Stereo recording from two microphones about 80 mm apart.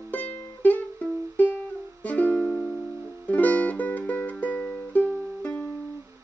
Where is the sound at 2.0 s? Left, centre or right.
Centre.